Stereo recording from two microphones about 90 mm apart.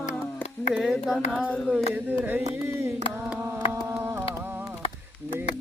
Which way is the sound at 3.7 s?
30° right (ahead or behind).